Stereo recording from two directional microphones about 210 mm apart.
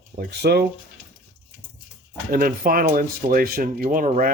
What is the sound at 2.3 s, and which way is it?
Speech, 45° right (ahead or behind).